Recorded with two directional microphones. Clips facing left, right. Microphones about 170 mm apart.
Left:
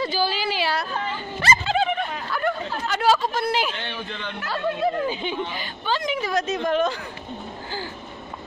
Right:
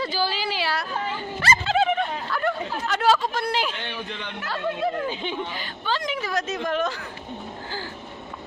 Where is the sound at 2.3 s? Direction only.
Centre (ahead or behind).